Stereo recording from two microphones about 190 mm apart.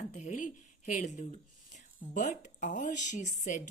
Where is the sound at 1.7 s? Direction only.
40° left (ahead or behind).